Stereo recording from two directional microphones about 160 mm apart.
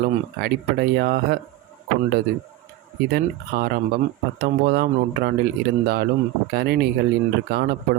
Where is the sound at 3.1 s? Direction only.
85° right.